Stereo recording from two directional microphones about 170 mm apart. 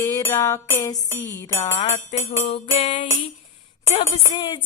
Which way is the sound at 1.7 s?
40° left (ahead or behind).